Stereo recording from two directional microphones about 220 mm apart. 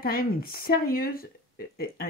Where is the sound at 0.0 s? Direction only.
45° left (ahead or behind).